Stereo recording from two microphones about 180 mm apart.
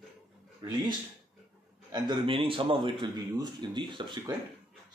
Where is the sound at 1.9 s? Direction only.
25° right (ahead or behind).